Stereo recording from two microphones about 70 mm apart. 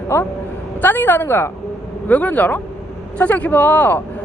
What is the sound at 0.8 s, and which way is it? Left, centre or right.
A woman's voice, left.